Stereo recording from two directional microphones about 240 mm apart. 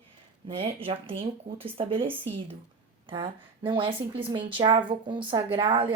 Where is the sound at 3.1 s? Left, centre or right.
Right.